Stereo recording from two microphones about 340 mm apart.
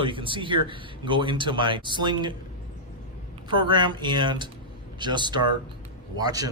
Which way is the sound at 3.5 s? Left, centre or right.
Centre.